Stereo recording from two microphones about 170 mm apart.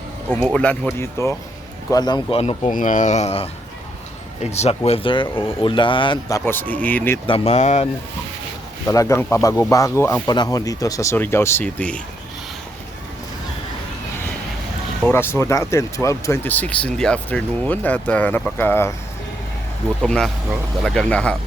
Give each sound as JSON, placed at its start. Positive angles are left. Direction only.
{"t": 0.4, "sound": "speech", "side_deg": 5}
{"t": 2.7, "sound": "speech", "side_deg": 50}
{"t": 4.5, "sound": "speech", "side_deg": 35}
{"t": 7.3, "sound": "speech", "side_deg": 35}
{"t": 8.9, "sound": "speech", "side_deg": 20}
{"t": 15.0, "sound": "speech", "side_deg": 15}
{"t": 20.0, "sound": "speech", "side_deg": 5}